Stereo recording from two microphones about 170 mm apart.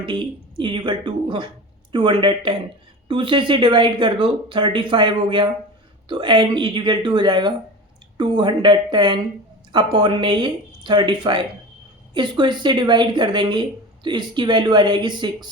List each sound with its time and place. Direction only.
0.0 s speech: 25° right (ahead or behind)